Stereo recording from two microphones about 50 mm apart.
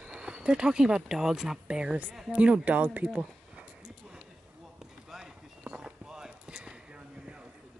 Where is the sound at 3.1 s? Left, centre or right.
Centre.